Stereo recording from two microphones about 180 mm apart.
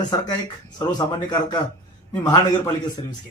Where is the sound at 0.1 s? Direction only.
20° left (ahead or behind).